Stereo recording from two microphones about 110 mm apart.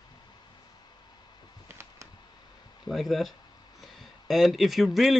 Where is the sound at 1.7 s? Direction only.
25° right (ahead or behind).